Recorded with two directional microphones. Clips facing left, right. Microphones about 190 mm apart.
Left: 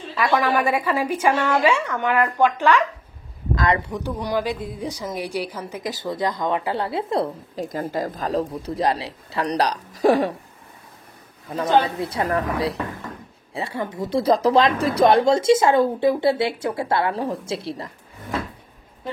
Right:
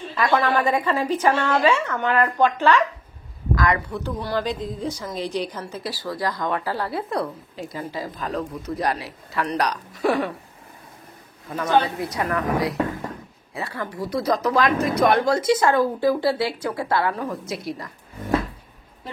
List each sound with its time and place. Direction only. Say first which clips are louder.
0.1 s a woman's voice: even; 5° left (ahead or behind)
3.5 s speech: left 1 dB; 25° left (ahead or behind)
3.9 s a woman's voice: left 1 dB; 15° left (ahead or behind)
7.5 s speech: left 6 dB; 45° left (ahead or behind)
8.3 s speech: left 3 dB; 30° left (ahead or behind)
11.5 s a woman's voice: left 1 dB; 25° left (ahead or behind)
13.5 s a woman's voice: left 3 dB; 25° left (ahead or behind)